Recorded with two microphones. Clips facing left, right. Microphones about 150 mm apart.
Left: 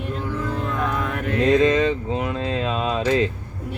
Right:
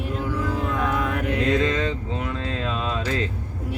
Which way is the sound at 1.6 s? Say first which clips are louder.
Left 6 dB; 20° left (ahead or behind).